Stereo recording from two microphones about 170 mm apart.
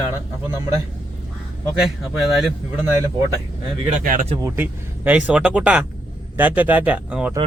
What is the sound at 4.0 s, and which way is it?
Speech, 50° right (ahead or behind).